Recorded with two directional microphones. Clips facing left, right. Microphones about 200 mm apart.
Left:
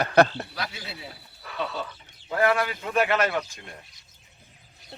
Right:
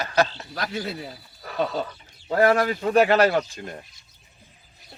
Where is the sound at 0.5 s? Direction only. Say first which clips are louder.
Right 7 dB; 45° right (ahead or behind).